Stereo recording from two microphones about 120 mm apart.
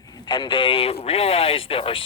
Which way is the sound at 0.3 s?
40° left (ahead or behind).